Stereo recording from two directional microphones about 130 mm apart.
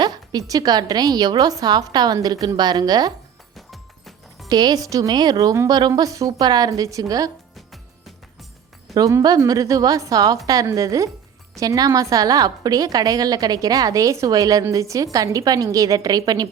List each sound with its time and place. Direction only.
0.0 s a woman's voice: 30° right (ahead or behind)
3.7 s music: centre (ahead or behind)
4.4 s a woman's voice: 30° right (ahead or behind)
7.5 s music: centre (ahead or behind)
9.0 s a woman's voice: 25° right (ahead or behind)